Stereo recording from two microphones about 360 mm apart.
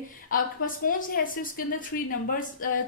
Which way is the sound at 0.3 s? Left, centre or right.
Left.